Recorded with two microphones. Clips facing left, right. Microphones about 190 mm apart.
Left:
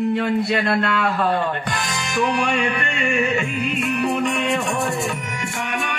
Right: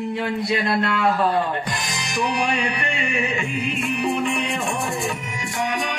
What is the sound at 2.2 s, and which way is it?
Music, 45° left (ahead or behind).